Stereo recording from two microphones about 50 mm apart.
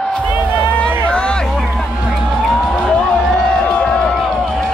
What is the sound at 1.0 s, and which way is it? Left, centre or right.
Music, left.